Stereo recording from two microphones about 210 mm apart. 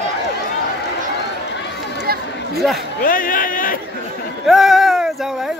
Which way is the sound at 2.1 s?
45° right (ahead or behind).